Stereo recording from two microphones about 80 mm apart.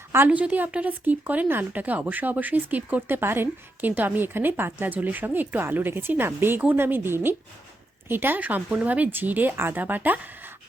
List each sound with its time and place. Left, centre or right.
0.3 s speech: centre